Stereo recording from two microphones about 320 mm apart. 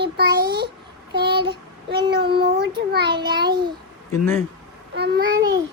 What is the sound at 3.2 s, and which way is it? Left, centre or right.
Speech, right.